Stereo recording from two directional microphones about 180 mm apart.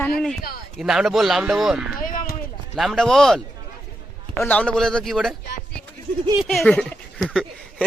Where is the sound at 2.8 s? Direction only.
Centre (ahead or behind).